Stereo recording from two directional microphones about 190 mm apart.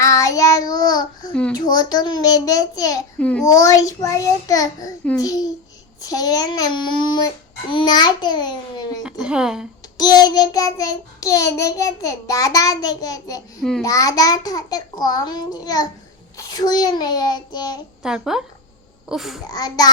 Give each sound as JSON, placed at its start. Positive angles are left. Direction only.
{"t": 0.0, "sound": "child singing", "side_deg": 15}
{"t": 1.3, "sound": "a woman's voice", "side_deg": 5}
{"t": 1.5, "sound": "child singing", "side_deg": 20}
{"t": 3.2, "sound": "a child's voice", "side_deg": 5}
{"t": 3.4, "sound": "a child's voice", "side_deg": 15}
{"t": 5.2, "sound": "child singing", "side_deg": 20}
{"t": 9.0, "sound": "a woman's voice", "side_deg": -5}
{"t": 10.0, "sound": "child singing", "side_deg": 20}
{"t": 13.6, "sound": "a woman's voice", "side_deg": 5}
{"t": 13.8, "sound": "child singing", "side_deg": 20}
{"t": 18.0, "sound": "a woman's voice", "side_deg": -5}
{"t": 19.5, "sound": "child singing", "side_deg": 20}